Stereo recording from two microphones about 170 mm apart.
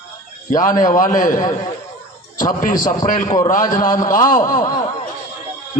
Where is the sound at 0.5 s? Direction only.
50° left (ahead or behind).